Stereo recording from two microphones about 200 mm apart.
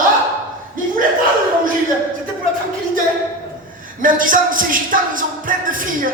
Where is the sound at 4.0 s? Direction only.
45° right (ahead or behind).